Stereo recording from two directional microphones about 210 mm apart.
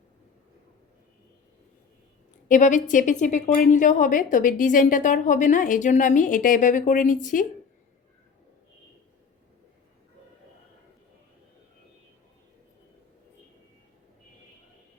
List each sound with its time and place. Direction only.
2.5 s a woman's voice: 35° left (ahead or behind)